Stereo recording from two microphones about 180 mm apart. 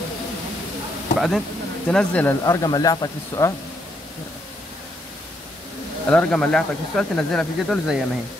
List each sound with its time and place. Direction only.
1.1 s speech: centre (ahead or behind); by 3.5 s 20° left (ahead or behind)
6.0 s speech: 5° left (ahead or behind)